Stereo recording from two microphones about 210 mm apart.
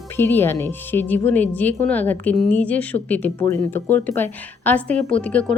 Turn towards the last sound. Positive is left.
turn(degrees=5)  # may be behind; listen again after turning